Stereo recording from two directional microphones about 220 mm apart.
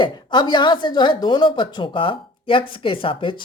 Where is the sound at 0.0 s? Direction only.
20° left (ahead or behind).